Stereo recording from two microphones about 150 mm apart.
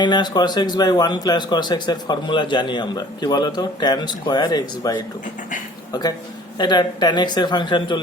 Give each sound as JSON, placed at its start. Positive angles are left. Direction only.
{"t": 0.0, "sound": "speech", "side_deg": 30}